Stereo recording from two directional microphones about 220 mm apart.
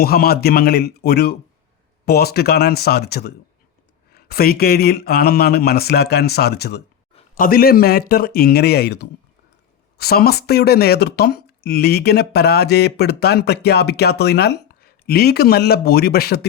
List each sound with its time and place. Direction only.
0.0 s speech: 45° left (ahead or behind)